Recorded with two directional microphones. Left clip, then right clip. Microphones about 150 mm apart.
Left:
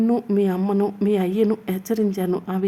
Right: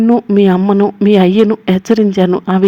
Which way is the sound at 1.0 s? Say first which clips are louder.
Right 12 dB; 35° right (ahead or behind).